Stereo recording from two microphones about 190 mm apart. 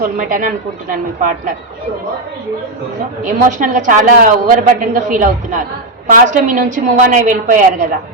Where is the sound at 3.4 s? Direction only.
45° right (ahead or behind).